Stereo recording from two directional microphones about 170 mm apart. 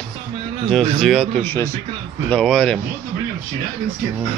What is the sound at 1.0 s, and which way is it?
A man's voice, 5° left (ahead or behind).